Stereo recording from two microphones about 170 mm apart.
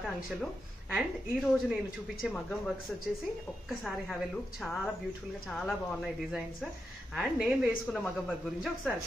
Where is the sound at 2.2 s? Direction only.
5° left (ahead or behind).